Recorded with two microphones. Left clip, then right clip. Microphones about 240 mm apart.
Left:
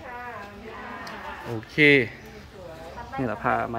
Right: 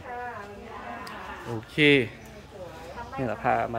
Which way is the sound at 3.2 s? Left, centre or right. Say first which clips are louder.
Even; centre.